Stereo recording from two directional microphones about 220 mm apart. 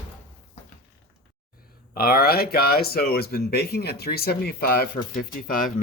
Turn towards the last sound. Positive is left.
turn(degrees=40)  # may be behind; listen again after turning